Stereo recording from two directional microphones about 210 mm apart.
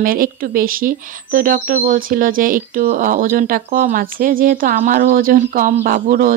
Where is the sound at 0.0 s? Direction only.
45° right (ahead or behind).